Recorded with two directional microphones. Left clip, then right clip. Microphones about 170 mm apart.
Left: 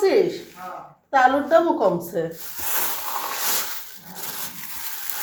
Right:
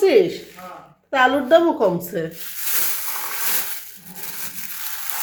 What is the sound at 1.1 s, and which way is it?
A woman's voice, 35° right (ahead or behind).